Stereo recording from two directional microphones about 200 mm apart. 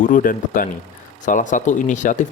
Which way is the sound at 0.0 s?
45° left (ahead or behind).